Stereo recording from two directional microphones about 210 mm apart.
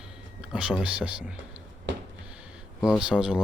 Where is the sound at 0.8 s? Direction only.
5° right (ahead or behind).